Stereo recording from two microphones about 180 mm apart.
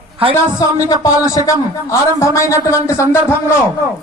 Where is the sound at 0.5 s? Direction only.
20° left (ahead or behind).